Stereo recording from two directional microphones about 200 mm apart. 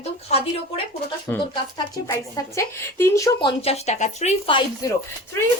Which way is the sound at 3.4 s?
30° left (ahead or behind).